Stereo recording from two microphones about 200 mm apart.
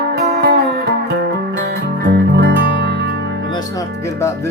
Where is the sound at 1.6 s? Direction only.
55° right (ahead or behind).